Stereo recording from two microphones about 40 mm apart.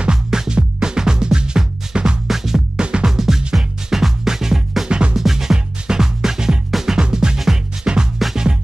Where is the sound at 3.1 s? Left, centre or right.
Centre.